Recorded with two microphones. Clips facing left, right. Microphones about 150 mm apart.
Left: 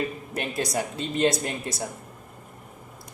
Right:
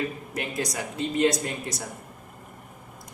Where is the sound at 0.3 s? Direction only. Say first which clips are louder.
Left 3 dB; 30° left (ahead or behind).